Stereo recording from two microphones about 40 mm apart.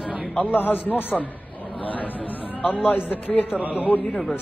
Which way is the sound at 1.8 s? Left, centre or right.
Left.